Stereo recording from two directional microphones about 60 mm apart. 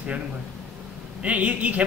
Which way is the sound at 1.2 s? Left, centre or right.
Right.